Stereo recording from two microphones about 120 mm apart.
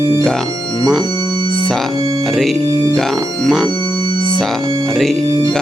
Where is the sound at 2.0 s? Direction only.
30° right (ahead or behind).